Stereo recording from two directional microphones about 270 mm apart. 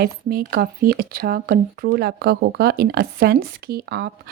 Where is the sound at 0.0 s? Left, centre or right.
Right.